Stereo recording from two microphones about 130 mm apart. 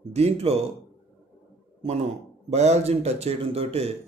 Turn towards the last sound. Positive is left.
turn(degrees=-50)  # may be behind; listen again after turning